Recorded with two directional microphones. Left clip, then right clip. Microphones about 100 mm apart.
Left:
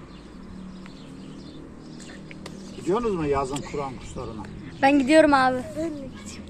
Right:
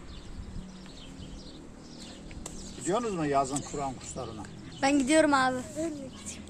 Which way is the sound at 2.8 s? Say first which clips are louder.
Left 6 dB; 50° right (ahead or behind).